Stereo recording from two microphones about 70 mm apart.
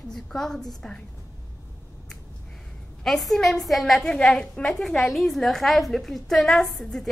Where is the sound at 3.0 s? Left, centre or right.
Centre.